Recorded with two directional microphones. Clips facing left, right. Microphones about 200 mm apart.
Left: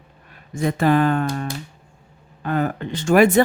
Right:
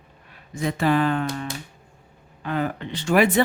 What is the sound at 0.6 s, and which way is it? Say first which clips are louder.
Speech: left 3 dB; 50° left (ahead or behind).